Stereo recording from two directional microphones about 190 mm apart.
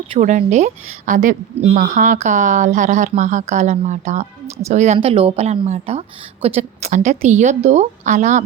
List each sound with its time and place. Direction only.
0.1 s a woman's voice: 40° right (ahead or behind)